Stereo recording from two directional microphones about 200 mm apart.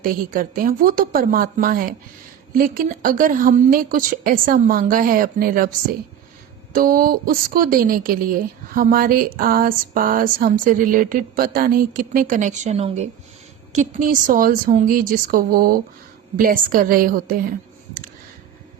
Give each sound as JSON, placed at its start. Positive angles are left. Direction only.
{"t": 0.0, "sound": "a woman's voice", "side_deg": -45}
{"t": 6.7, "sound": "a woman's voice", "side_deg": -45}
{"t": 13.7, "sound": "a woman's voice", "side_deg": -40}